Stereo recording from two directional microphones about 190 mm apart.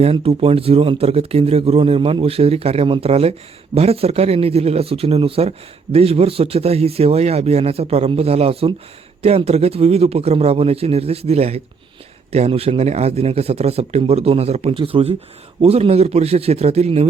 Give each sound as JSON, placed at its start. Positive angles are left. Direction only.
{"t": 0.0, "sound": "speech", "side_deg": -30}